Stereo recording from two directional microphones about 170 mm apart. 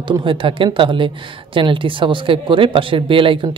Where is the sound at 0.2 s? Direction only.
30° right (ahead or behind).